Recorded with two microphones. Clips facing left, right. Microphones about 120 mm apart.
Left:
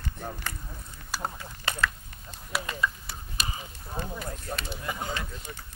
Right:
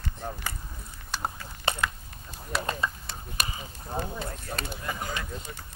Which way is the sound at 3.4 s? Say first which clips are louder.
Right 2 dB; 50° right (ahead or behind).